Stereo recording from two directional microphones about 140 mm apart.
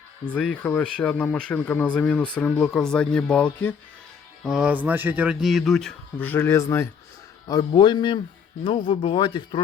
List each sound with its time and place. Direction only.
0.3 s speech: 10° left (ahead or behind)
4.4 s speech: 5° right (ahead or behind); by 6.8 s 20° left (ahead or behind)
7.7 s speech: 35° left (ahead or behind)